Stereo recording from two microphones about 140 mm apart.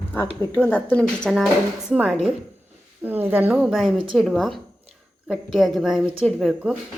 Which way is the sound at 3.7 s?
Centre (ahead or behind).